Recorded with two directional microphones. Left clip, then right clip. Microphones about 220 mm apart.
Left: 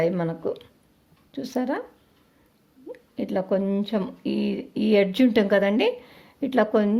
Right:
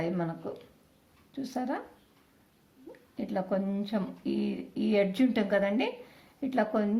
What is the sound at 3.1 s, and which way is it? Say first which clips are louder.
Speech: left 7 dB; 45° left (ahead or behind).